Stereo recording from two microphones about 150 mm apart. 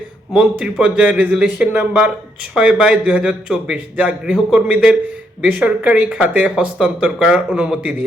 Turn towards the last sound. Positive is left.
turn(degrees=-5)  # may be behind; listen again after turning